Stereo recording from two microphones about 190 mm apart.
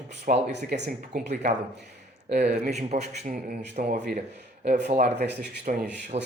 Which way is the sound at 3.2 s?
50° right (ahead or behind).